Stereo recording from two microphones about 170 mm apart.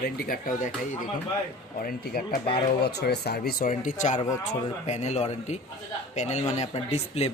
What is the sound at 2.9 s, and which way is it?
Speech, 70° left (ahead or behind).